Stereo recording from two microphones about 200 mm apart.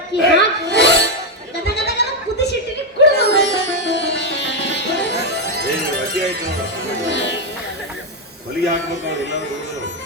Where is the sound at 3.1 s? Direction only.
60° left (ahead or behind).